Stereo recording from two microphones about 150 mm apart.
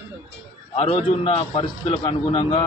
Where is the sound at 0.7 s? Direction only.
35° left (ahead or behind).